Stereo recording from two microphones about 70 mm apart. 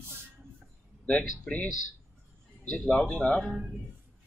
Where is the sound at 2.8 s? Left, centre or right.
Centre.